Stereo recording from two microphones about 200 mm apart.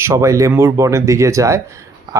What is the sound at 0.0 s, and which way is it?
Speech, 15° right (ahead or behind).